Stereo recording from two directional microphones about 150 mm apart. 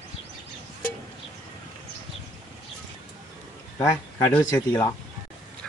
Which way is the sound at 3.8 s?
15° left (ahead or behind).